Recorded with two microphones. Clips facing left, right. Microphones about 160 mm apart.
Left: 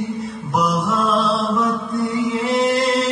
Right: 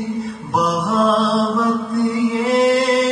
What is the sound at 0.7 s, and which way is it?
Mantra, 30° right (ahead or behind).